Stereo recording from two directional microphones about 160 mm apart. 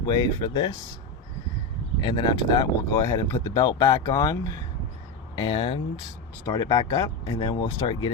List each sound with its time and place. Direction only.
0.0 s speech: 25° left (ahead or behind)
2.0 s speech: 30° left (ahead or behind)
5.4 s speech: 35° left (ahead or behind)